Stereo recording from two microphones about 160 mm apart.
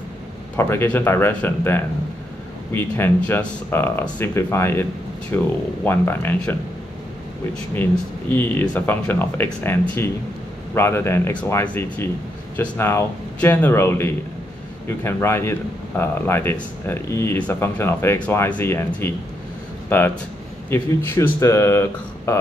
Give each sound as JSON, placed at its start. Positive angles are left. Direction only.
{"t": 0.6, "sound": "speech", "side_deg": 15}
{"t": 8.3, "sound": "speech", "side_deg": 10}